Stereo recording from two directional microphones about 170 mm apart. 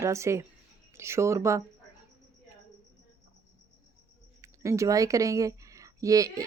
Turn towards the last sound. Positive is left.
turn(degrees=-20)  # may be behind; listen again after turning